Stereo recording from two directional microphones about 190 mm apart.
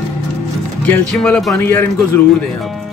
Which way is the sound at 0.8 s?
5° left (ahead or behind).